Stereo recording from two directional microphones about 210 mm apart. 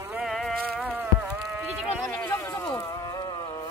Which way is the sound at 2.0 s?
10° left (ahead or behind).